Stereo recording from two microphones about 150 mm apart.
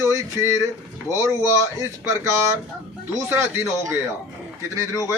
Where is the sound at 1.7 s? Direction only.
20° right (ahead or behind).